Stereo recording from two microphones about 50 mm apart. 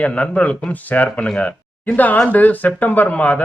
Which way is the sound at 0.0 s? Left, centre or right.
Left.